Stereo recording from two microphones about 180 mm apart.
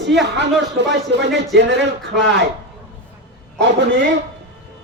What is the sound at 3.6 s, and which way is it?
Speech, 85° right.